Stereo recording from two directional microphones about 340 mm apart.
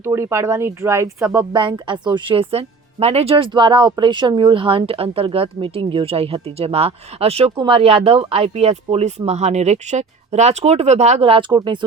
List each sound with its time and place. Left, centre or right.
0.0 s speech: centre